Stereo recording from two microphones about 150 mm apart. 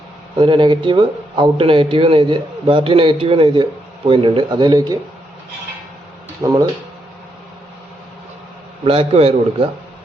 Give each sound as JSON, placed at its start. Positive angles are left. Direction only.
{"t": 0.3, "sound": "a man's voice", "side_deg": -30}
{"t": 6.4, "sound": "speech", "side_deg": -25}
{"t": 8.8, "sound": "a man's voice", "side_deg": -40}